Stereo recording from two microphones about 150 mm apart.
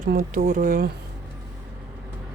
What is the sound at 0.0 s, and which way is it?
Speech, 65° right (ahead or behind).